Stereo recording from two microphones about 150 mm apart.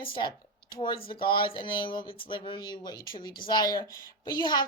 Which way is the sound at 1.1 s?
35° left (ahead or behind).